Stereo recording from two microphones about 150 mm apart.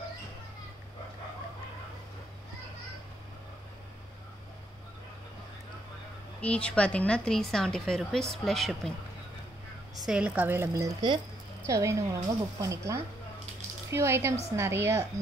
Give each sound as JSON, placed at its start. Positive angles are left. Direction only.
{"t": 6.4, "sound": "a woman's voice", "side_deg": 10}
{"t": 10.0, "sound": "a woman's voice", "side_deg": -5}